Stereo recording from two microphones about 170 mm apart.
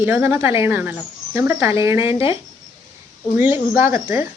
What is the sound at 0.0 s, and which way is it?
A woman's voice, 15° right (ahead or behind).